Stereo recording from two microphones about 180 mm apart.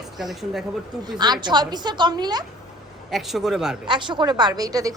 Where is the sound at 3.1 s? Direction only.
Centre (ahead or behind).